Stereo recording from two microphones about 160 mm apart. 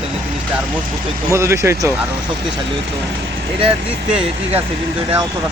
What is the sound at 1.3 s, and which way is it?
Speech, 20° right (ahead or behind).